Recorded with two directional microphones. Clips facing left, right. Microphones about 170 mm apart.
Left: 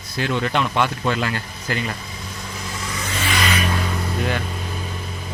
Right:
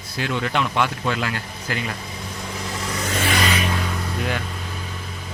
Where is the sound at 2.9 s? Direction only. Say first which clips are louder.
Right 2 dB; 45° right (ahead or behind).